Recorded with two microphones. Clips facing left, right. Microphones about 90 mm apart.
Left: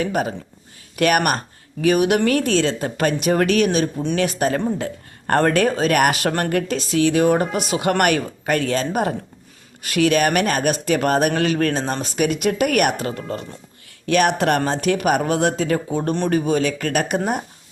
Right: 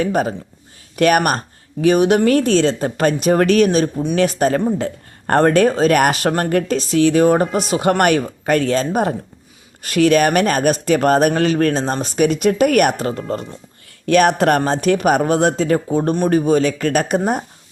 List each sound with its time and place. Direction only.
0.0 s speech: 35° right (ahead or behind)